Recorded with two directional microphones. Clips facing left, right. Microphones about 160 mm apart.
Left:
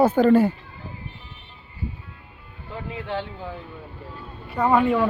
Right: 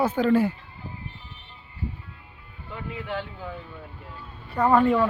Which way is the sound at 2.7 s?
30° left (ahead or behind).